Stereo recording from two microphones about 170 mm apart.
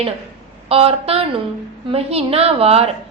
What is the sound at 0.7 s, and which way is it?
A woman's voice, 35° right (ahead or behind).